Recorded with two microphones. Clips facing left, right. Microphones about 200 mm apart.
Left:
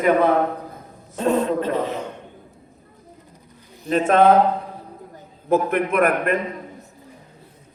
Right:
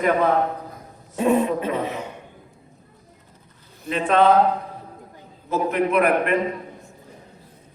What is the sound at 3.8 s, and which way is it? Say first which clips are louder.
Speech: left 2 dB; 45° left (ahead or behind).